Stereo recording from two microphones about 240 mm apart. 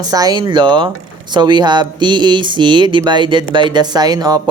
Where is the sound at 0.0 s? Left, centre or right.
Centre.